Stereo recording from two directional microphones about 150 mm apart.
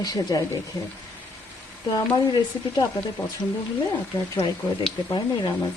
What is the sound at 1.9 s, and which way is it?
Speech, 25° left (ahead or behind).